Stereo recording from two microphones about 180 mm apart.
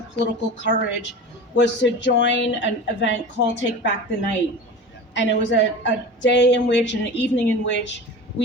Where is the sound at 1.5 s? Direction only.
80° left.